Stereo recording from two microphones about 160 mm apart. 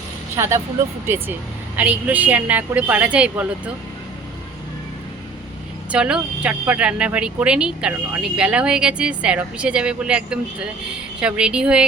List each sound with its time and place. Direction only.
0.3 s speech: 15° right (ahead or behind)
1.7 s speech: 10° right (ahead or behind)
5.9 s speech: 5° right (ahead or behind)